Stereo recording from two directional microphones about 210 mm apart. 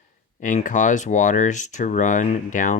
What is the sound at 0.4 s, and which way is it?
Speech, 35° left (ahead or behind).